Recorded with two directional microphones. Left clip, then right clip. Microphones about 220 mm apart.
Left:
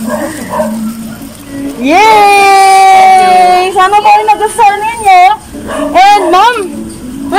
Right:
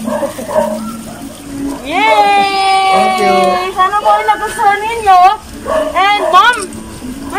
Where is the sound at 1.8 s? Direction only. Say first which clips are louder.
Left 6 dB; 50° left (ahead or behind).